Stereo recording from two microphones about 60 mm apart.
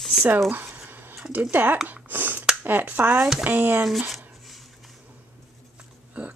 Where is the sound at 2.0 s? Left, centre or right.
Right.